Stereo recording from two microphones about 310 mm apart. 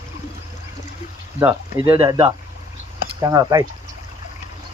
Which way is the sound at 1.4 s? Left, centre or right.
Centre.